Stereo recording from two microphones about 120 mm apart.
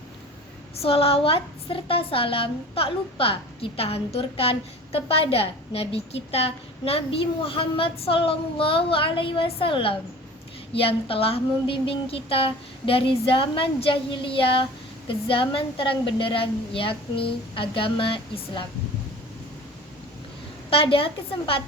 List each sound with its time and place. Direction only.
0.8 s a woman's voice: 50° left (ahead or behind)
20.7 s a woman's voice: 50° left (ahead or behind)